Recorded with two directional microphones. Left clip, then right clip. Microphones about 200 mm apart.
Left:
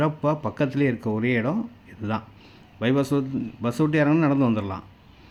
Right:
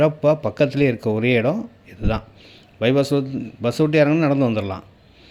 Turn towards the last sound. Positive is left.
turn(degrees=-5)  # may be behind; listen again after turning